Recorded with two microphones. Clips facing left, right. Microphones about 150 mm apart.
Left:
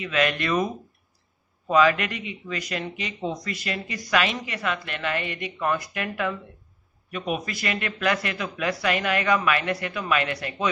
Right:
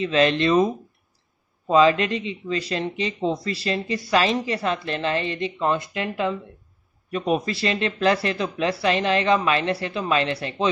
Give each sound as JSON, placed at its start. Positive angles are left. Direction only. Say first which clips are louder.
{"t": 0.0, "sound": "speech", "louder": "right 6 dB", "side_deg": -30}